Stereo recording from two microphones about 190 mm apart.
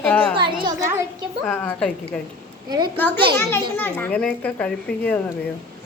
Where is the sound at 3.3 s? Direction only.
10° left (ahead or behind).